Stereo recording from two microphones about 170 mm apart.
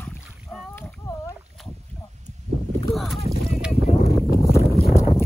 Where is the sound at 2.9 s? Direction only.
Centre (ahead or behind).